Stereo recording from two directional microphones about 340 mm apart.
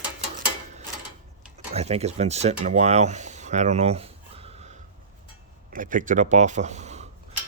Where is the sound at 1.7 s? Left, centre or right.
Centre.